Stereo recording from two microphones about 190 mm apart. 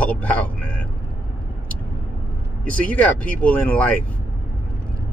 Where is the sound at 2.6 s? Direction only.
5° left (ahead or behind).